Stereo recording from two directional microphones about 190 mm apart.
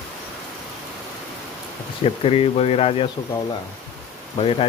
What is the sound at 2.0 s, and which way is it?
Speech, 30° left (ahead or behind).